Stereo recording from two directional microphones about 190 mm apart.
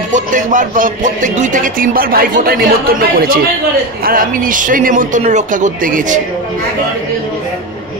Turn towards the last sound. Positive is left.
turn(degrees=-45)  # may be behind; listen again after turning